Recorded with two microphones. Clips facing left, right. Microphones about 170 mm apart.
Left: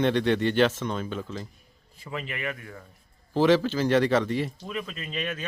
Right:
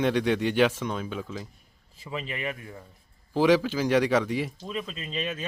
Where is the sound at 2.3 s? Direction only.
25° right (ahead or behind).